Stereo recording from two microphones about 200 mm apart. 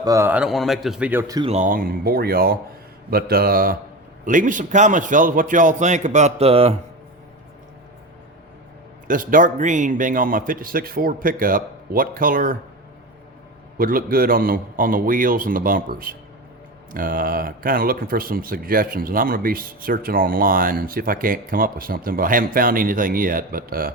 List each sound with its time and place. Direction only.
0.0 s a man's voice: 15° right (ahead or behind)
1.3 s speech: 20° right (ahead or behind)
1.5 s a man's voice: 45° right (ahead or behind)
9.0 s speech: 40° right (ahead or behind)
13.7 s speech: 45° right (ahead or behind)